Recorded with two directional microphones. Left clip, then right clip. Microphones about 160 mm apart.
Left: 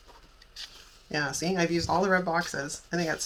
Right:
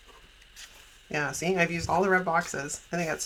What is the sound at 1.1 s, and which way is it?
Speech, 30° right (ahead or behind).